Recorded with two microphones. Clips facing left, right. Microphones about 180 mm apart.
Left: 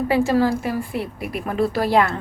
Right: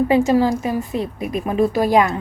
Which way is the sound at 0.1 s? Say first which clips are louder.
Right 3 dB; 20° right (ahead or behind).